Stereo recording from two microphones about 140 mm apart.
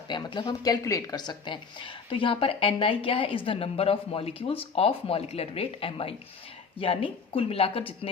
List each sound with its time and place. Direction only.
0.1 s speech: 35° left (ahead or behind)